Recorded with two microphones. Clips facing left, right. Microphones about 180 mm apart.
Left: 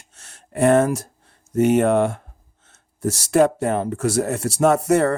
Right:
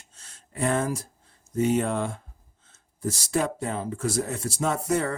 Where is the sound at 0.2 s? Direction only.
70° left (ahead or behind).